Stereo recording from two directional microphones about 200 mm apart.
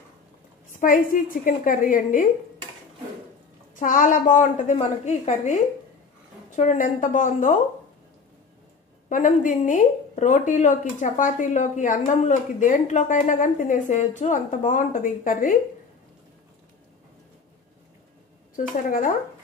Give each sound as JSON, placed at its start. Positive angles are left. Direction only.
{"t": 0.7, "sound": "a woman's voice", "side_deg": 45}
{"t": 3.7, "sound": "a woman's voice", "side_deg": 40}
{"t": 9.1, "sound": "a woman's voice", "side_deg": 40}
{"t": 18.6, "sound": "a woman's voice", "side_deg": 40}